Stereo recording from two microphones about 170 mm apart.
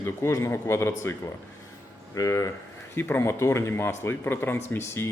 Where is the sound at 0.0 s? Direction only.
15° left (ahead or behind).